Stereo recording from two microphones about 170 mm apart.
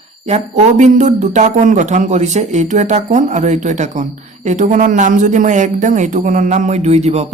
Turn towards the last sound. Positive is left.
turn(degrees=-40)  # may be behind; listen again after turning